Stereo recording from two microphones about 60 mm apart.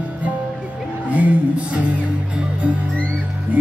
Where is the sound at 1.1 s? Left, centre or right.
Right.